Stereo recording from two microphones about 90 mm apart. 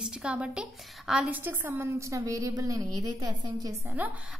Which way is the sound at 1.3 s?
20° right (ahead or behind).